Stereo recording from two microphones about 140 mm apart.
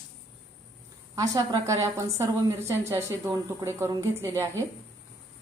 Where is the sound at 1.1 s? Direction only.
25° right (ahead or behind).